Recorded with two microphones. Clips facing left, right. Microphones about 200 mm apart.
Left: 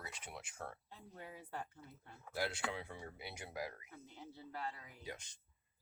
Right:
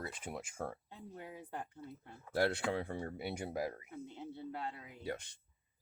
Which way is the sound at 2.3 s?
55° right (ahead or behind).